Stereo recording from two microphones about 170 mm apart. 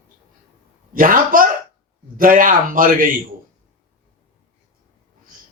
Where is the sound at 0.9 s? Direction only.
55° right (ahead or behind).